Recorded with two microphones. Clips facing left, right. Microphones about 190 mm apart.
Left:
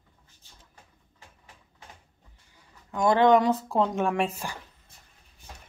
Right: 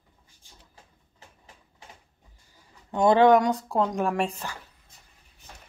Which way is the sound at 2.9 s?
30° right (ahead or behind).